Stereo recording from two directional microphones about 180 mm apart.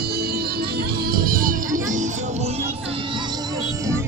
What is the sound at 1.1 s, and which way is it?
Music, 50° right (ahead or behind).